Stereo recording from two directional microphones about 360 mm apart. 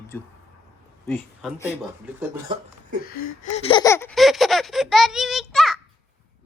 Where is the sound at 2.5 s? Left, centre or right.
Centre.